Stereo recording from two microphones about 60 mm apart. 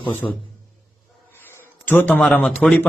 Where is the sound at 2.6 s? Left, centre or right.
Centre.